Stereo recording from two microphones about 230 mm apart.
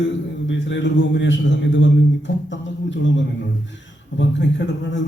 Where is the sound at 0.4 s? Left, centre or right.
Left.